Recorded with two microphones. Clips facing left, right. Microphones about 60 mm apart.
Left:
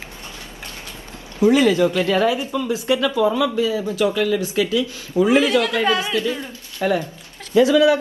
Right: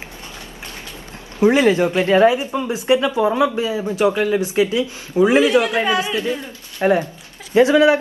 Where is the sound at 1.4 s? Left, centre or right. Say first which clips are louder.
Right 1 dB; right.